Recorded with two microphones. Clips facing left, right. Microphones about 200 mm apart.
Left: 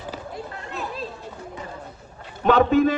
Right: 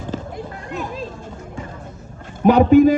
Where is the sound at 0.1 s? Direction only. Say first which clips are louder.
Right 7 dB; 10° left (ahead or behind).